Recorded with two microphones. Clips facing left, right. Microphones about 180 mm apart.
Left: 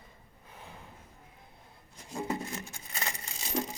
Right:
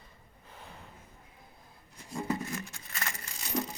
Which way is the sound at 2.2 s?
20° left (ahead or behind).